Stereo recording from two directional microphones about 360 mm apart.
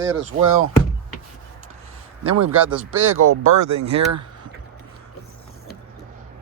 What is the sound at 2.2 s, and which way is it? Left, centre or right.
Speech, right.